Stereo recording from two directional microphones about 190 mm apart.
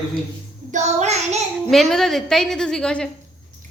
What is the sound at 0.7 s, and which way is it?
Child singing, 40° right (ahead or behind).